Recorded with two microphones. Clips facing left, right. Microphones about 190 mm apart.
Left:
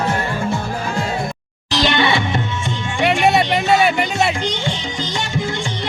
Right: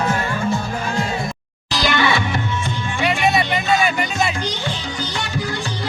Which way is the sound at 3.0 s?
70° left (ahead or behind).